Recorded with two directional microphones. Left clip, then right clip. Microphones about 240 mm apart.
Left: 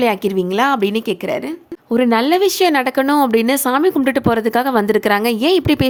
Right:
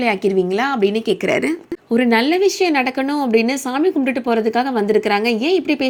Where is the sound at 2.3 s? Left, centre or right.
Left.